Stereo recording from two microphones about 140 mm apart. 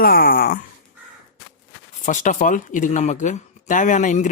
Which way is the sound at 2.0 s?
65° left (ahead or behind).